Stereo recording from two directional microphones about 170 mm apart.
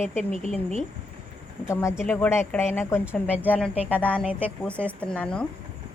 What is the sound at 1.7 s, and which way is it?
Speech, 15° left (ahead or behind).